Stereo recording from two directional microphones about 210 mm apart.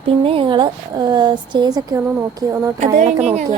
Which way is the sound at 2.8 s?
35° right (ahead or behind).